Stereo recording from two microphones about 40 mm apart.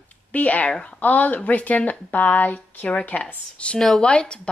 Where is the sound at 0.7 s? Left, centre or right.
Centre.